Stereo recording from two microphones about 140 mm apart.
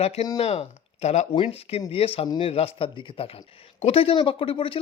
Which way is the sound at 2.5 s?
45° left (ahead or behind).